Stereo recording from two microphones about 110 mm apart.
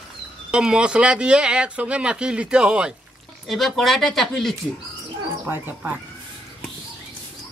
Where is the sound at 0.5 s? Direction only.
5° right (ahead or behind).